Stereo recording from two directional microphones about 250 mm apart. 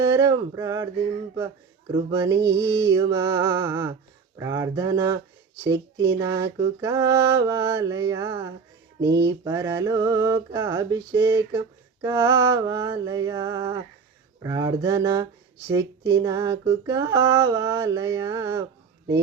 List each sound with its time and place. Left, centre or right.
0.0 s speech: centre
1.9 s speech: centre
9.0 s mantra: right
9.4 s speech: centre